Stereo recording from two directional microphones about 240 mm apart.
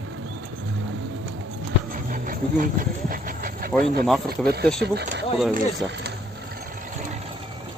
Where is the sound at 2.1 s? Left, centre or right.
Right.